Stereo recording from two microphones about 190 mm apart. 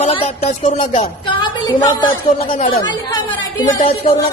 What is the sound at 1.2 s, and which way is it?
A woman's voice, 20° left (ahead or behind).